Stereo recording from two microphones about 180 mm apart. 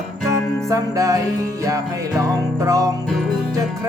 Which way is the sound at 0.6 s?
20° right (ahead or behind).